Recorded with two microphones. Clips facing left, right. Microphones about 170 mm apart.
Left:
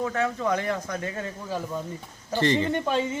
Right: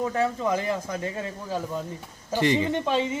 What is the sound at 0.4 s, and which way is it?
Speech, 5° right (ahead or behind).